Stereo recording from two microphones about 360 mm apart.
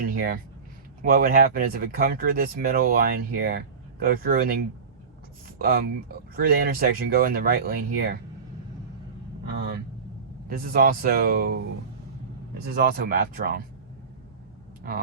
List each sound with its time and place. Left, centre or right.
0.0 s a sound: right
1.0 s speech: right
5.5 s speech: right
9.6 s speech: right